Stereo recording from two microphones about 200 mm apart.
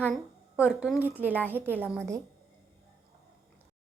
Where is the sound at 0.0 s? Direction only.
5° right (ahead or behind).